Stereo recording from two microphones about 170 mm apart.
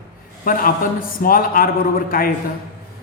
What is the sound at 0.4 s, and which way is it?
A man's voice, 55° left (ahead or behind).